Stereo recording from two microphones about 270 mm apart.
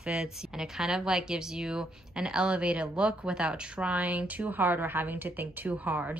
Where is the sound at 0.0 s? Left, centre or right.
Centre.